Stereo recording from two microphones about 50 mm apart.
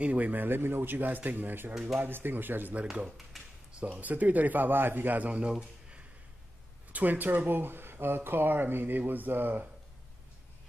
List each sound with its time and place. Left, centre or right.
0.0 s speech: right
1.7 s speech: centre
2.0 s speech: right
2.7 s speech: right
3.1 s speech: centre
3.8 s speech: right
5.3 s speech: right
6.9 s speech: right